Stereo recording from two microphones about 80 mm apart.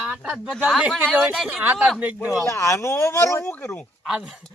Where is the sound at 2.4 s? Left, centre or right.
Left.